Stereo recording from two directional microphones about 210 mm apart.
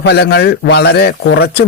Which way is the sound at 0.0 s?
50° left (ahead or behind).